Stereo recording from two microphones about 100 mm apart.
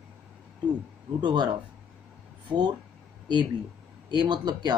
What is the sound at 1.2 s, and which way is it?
Speech, 50° right (ahead or behind).